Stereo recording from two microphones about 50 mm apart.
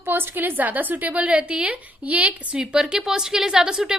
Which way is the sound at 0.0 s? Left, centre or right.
Right.